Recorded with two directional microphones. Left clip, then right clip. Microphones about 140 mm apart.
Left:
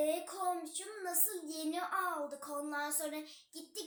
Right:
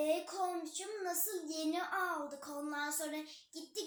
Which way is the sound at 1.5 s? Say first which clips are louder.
Right 3 dB; 20° left (ahead or behind).